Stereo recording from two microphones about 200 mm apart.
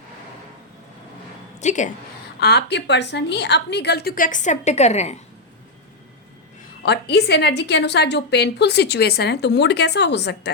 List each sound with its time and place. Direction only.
1.6 s a woman's voice: 35° left (ahead or behind)
2.4 s a woman's voice: 55° left (ahead or behind); by 5.2 s 35° left (ahead or behind)
6.8 s a woman's voice: 55° left (ahead or behind)